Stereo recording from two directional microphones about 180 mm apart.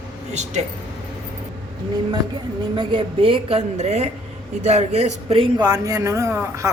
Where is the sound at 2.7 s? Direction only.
25° right (ahead or behind).